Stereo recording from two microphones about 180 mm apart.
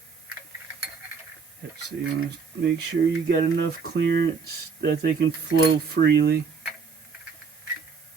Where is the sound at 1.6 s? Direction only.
80° right.